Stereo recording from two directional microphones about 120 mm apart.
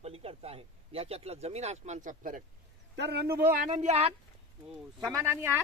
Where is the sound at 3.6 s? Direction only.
75° right (ahead or behind).